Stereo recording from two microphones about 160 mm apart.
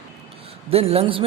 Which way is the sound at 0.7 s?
40° right (ahead or behind).